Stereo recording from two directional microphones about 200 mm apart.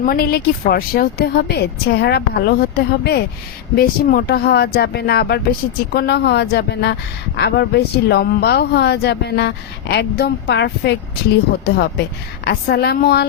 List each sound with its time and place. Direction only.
0.0 s a woman's voice: 50° left (ahead or behind)
12.5 s a woman's voice: 55° left (ahead or behind)